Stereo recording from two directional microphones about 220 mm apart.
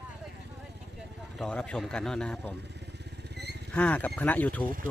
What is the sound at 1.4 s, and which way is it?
Speech, 5° left (ahead or behind).